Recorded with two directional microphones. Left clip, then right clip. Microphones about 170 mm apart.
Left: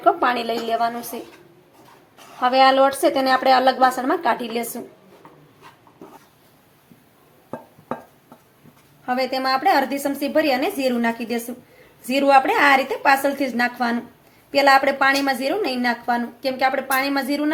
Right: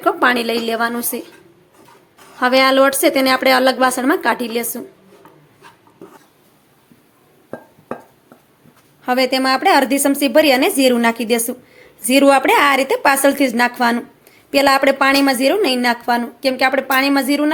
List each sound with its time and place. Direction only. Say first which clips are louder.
0.0 s a woman's voice: right 3 dB; 35° right (ahead or behind)
2.4 s a woman's voice: right 3 dB; 35° right (ahead or behind)
9.0 s a woman's voice: right 6 dB; 50° right (ahead or behind)